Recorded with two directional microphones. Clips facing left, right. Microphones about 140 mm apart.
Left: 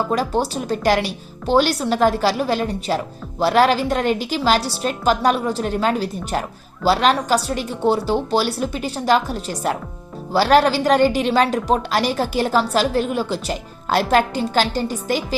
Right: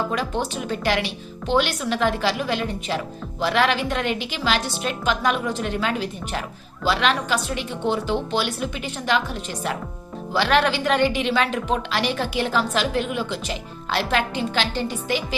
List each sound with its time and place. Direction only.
0.1 s a woman's voice: 35° left (ahead or behind)